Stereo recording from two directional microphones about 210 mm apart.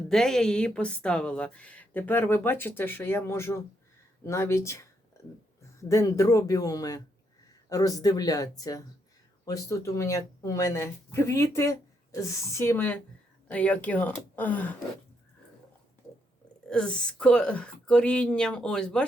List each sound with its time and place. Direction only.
0.1 s a woman's voice: centre (ahead or behind)
5.9 s a woman's voice: 15° left (ahead or behind)
16.6 s a woman's voice: 5° left (ahead or behind)